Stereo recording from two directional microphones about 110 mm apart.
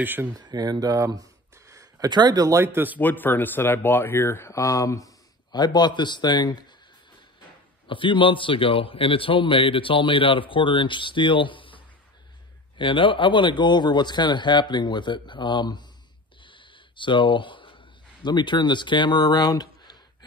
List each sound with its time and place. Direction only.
0.0 s speech: 20° right (ahead or behind)
0.3 s a man's voice: 35° right (ahead or behind); by 3.0 s 20° right (ahead or behind)
3.0 s speech: 15° left (ahead or behind); by 6.6 s 40° left (ahead or behind)
7.9 s a man's voice: 50° left (ahead or behind)
16.4 s a sound: 50° left (ahead or behind)
18.2 s a man's voice: 45° left (ahead or behind)